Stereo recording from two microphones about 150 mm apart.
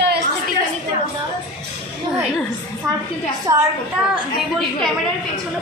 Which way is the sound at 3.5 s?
20° right (ahead or behind).